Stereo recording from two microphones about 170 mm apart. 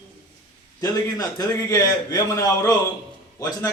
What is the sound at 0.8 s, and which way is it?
A man's voice, 20° left (ahead or behind).